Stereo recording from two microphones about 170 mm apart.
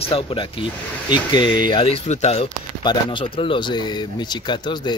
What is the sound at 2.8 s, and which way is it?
A man's voice, 25° left (ahead or behind).